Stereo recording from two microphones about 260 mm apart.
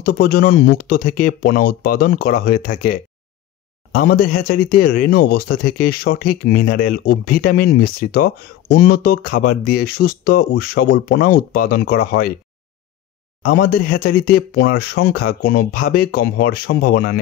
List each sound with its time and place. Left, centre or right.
0.0 s speech: left
13.4 s speech: left